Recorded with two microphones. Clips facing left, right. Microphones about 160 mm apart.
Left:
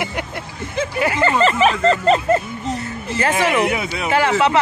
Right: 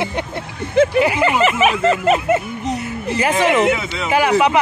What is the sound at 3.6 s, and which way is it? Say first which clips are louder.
Speech: right 3 dB; 15° left (ahead or behind).